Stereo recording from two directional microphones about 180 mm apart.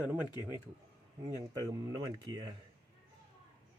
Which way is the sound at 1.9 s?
20° right (ahead or behind).